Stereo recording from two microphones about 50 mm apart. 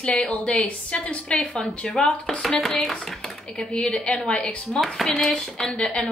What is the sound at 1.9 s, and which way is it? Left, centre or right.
Speech, centre.